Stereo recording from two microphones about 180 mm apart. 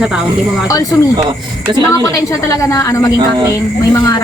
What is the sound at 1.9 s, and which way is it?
A woman's voice, 15° left (ahead or behind).